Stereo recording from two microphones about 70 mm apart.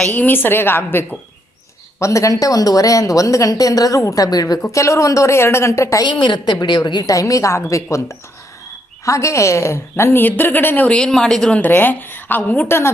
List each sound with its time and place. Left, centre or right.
0.1 s a woman's voice: left
2.0 s speech: left
4.6 s speech: left
6.0 s a woman's voice: left
7.1 s a woman's voice: left
10.8 s speech: centre
11.5 s a woman's voice: left